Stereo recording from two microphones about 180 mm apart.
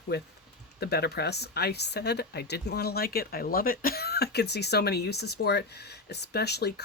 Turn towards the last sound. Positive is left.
turn(degrees=65)  # may be behind; listen again after turning